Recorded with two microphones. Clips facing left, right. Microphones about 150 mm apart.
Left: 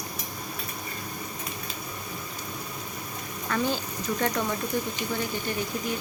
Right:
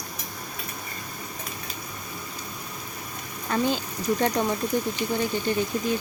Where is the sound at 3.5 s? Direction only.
25° right (ahead or behind).